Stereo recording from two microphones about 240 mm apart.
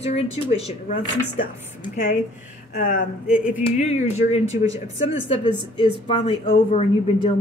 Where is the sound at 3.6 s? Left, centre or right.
Left.